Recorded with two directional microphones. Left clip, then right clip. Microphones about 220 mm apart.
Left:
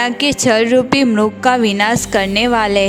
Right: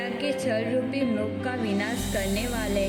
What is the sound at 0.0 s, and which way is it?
Speech, 50° left (ahead or behind).